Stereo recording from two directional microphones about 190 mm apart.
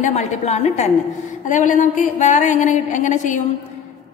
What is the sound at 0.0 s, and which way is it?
A woman's voice, 40° left (ahead or behind).